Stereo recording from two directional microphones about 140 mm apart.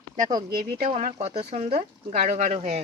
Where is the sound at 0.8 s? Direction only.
45° right (ahead or behind).